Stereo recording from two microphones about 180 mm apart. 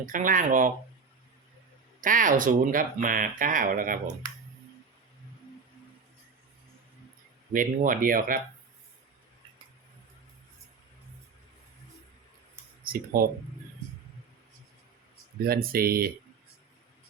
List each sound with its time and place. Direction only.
0.0 s speech: 45° right (ahead or behind)
2.0 s speech: 45° right (ahead or behind)
7.5 s speech: 50° right (ahead or behind)
12.8 s speech: 55° right (ahead or behind)
15.4 s speech: 55° right (ahead or behind)